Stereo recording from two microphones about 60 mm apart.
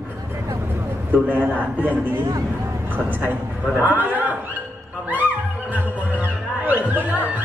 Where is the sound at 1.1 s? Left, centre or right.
Right.